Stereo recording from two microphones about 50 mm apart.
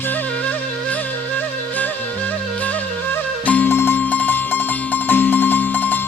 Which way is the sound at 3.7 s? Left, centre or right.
Left.